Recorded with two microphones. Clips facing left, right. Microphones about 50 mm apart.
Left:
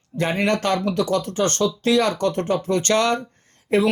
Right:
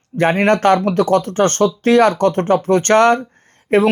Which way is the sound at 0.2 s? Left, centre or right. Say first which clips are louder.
Right 7 dB; right.